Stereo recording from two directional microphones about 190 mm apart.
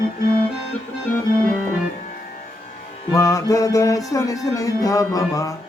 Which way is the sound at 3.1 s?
15° left (ahead or behind).